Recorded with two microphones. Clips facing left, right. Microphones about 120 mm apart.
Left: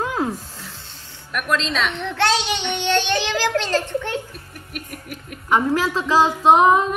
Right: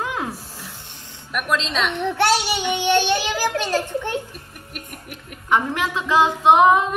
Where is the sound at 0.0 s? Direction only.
35° left (ahead or behind).